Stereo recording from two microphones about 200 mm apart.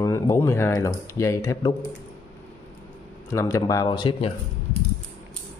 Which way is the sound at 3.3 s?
15° left (ahead or behind).